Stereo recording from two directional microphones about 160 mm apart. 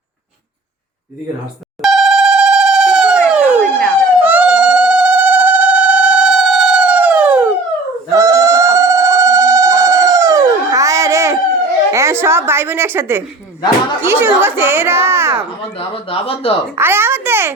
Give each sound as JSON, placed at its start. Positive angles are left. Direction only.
{"t": 1.8, "sound": "dial tone", "side_deg": 0}
{"t": 3.6, "sound": "police car", "side_deg": 5}
{"t": 4.2, "sound": "a sound", "side_deg": -10}
{"t": 8.1, "sound": "sheep", "side_deg": -20}
{"t": 11.9, "sound": "a child's voice", "side_deg": -20}
{"t": 16.0, "sound": "speech", "side_deg": 35}
{"t": 16.7, "sound": "speech", "side_deg": -15}